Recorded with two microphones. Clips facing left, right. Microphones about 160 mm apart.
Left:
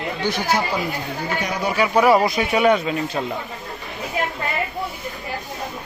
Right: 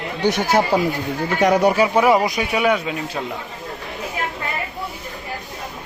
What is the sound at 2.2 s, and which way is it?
Speech, 15° right (ahead or behind).